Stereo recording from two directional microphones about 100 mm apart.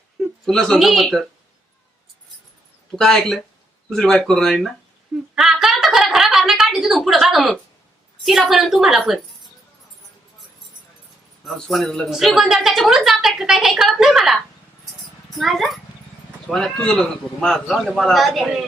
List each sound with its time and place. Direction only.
0.2 s speech: 5° left (ahead or behind)
2.9 s a man's voice: 5° left (ahead or behind)
5.3 s a sound: 5° right (ahead or behind)
8.2 s a man's voice: centre (ahead or behind)
11.4 s a man's voice: centre (ahead or behind)